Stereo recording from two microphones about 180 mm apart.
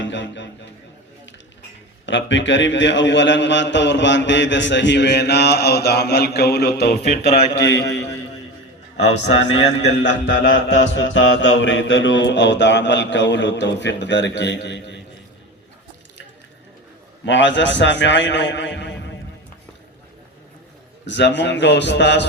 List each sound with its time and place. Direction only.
0.0 s a sound: 90° left
2.0 s a man's voice: 90° left; by 7.0 s 65° left (ahead or behind)
7.3 s a man's voice: 75° left (ahead or behind)
9.8 s a man's voice: 75° left (ahead or behind)
10.5 s a man's voice: 90° left
17.2 s a man's voice: 90° left
21.1 s a man's voice: 75° left (ahead or behind)